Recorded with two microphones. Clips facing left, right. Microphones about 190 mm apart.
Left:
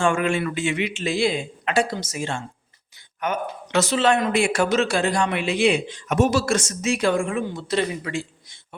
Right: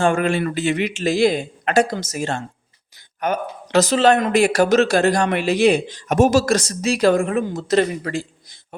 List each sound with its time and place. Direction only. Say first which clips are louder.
0.0 s speech: right 3 dB; 35° right (ahead or behind)